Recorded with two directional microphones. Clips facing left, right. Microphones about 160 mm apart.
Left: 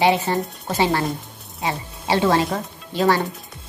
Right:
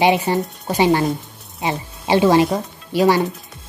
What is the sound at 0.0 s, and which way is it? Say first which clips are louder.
Speech: right 2 dB; 15° right (ahead or behind).